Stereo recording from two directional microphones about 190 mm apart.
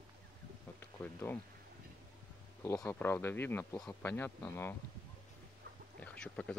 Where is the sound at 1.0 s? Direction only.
10° left (ahead or behind).